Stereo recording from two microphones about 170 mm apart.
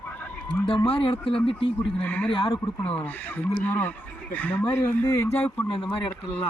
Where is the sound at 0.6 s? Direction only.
30° left (ahead or behind).